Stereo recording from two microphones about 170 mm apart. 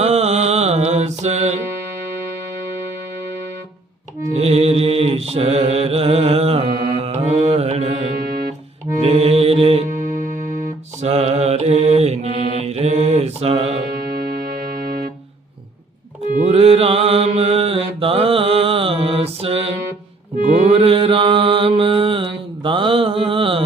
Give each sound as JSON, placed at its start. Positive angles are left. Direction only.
{"t": 0.0, "sound": "mantra", "side_deg": -40}
{"t": 4.4, "sound": "mantra", "side_deg": -35}
{"t": 7.0, "sound": "music", "side_deg": -40}
{"t": 16.4, "sound": "mantra", "side_deg": -35}